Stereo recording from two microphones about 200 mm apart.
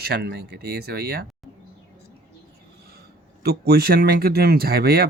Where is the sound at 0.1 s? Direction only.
55° right (ahead or behind).